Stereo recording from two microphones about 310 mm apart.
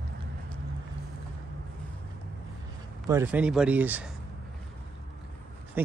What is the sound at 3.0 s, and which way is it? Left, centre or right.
Speech, centre.